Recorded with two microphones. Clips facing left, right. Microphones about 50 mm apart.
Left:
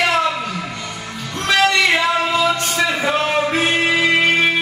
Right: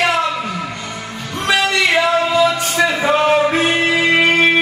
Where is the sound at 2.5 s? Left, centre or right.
Centre.